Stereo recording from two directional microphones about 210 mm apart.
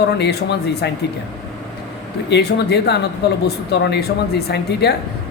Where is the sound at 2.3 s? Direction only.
50° left (ahead or behind).